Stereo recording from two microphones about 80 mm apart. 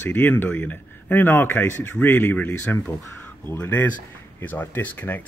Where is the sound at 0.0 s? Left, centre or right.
Left.